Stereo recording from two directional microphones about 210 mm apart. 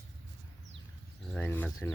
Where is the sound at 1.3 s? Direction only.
10° left (ahead or behind).